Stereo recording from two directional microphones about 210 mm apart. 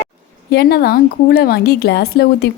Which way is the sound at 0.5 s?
50° left (ahead or behind).